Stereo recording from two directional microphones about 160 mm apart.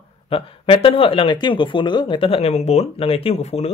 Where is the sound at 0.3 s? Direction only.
35° left (ahead or behind).